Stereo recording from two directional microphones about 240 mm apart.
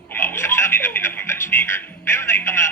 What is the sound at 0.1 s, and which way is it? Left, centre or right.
A man's voice, centre.